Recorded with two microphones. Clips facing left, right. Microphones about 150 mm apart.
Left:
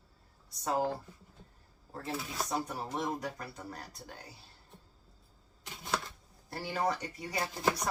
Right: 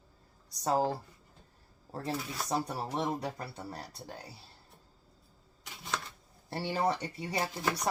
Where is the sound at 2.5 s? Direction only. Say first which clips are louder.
Right 4 dB; 35° right (ahead or behind).